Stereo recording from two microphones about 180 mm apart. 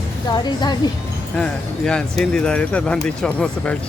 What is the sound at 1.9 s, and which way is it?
Speech, 5° left (ahead or behind).